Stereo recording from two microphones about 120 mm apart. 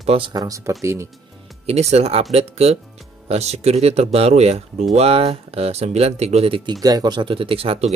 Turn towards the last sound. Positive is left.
turn(degrees=-50)  # may be behind; listen again after turning